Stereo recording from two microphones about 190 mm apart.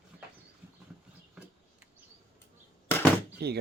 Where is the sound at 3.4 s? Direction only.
60° right (ahead or behind).